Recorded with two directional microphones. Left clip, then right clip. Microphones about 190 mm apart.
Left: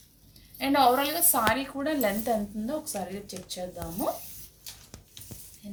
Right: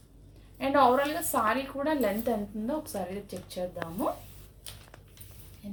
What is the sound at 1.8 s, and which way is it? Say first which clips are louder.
A woman's voice: even; 20° right (ahead or behind).